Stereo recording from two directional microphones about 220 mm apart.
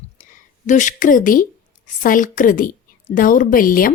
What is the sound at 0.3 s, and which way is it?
A woman's voice, 35° left (ahead or behind).